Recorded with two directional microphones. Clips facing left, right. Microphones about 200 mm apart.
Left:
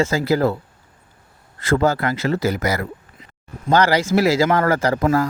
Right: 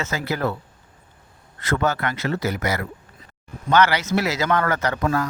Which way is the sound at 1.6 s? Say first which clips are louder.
Left 5 dB; 30° left (ahead or behind).